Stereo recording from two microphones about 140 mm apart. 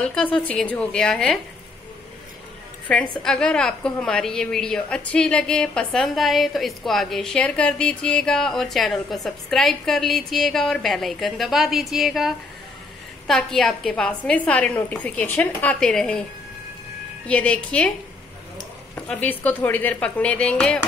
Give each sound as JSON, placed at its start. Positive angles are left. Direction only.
{"t": 0.0, "sound": "a woman's voice", "side_deg": 10}
{"t": 3.2, "sound": "a woman's voice", "side_deg": 5}
{"t": 17.3, "sound": "a woman's voice", "side_deg": 10}
{"t": 18.9, "sound": "a woman's voice", "side_deg": 10}